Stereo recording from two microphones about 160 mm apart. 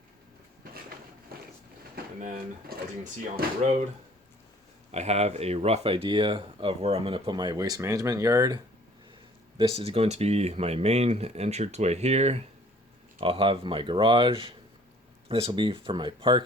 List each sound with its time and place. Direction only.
2.2 s speech: 60° right (ahead or behind)
4.9 s speech: 40° right (ahead or behind); by 8.6 s 25° right (ahead or behind)
9.7 s speech: 40° right (ahead or behind)